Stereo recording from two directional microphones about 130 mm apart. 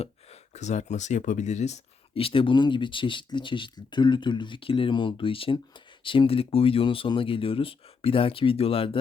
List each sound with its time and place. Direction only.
0.0 s speech: 60° left (ahead or behind)